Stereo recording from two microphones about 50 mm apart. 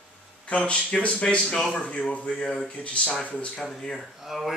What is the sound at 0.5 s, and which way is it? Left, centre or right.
Speech, left.